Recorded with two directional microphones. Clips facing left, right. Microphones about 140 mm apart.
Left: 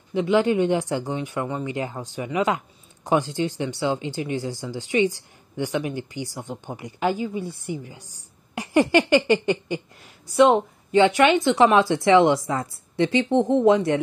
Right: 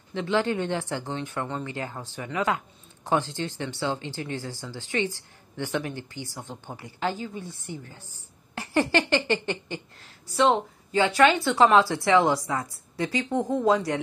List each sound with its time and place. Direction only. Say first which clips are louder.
0.1 s speech: left 6 dB; 15° left (ahead or behind)